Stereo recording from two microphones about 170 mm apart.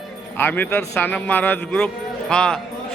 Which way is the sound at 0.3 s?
10° left (ahead or behind).